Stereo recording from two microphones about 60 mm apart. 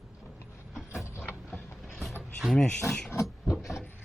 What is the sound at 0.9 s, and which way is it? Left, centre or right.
Mechanisms, left.